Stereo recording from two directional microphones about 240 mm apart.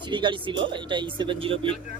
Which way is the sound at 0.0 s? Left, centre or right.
Centre.